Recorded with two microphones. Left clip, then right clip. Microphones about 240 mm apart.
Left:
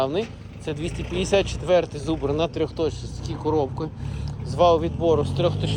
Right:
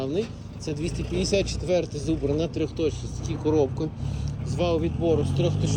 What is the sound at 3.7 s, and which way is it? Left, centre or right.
Speech, centre.